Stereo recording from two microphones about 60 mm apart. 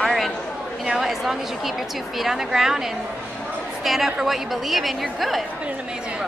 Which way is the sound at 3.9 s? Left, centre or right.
Centre.